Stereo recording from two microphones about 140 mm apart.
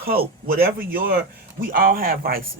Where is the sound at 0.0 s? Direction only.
90° right.